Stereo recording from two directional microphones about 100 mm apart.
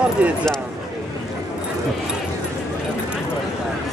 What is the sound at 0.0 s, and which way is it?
Speech, 10° right (ahead or behind).